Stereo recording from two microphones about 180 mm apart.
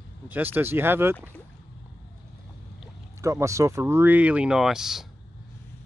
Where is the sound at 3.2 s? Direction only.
15° right (ahead or behind).